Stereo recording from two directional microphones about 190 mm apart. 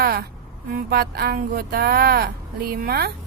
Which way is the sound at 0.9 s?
55° right (ahead or behind).